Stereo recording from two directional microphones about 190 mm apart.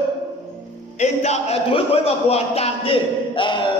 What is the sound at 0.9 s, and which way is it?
A man's voice, 35° left (ahead or behind).